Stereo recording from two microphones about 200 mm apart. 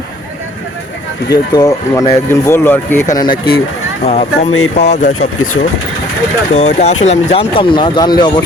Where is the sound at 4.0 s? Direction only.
30° left (ahead or behind).